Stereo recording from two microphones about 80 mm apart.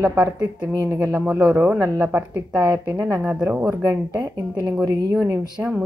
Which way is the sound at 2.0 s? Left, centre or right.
Right.